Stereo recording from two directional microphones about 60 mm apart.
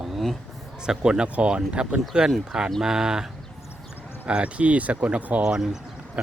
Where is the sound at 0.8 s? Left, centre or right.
Centre.